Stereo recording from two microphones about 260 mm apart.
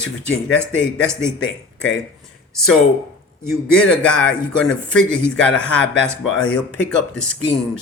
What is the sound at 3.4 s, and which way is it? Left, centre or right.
A man's voice, centre.